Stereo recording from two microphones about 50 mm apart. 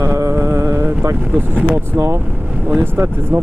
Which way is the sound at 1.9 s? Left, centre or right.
Right.